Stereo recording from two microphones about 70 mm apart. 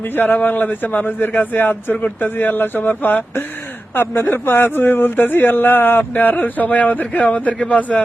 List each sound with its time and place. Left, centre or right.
0.2 s speech: left